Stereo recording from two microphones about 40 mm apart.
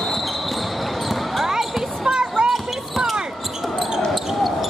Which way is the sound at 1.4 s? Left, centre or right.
Centre.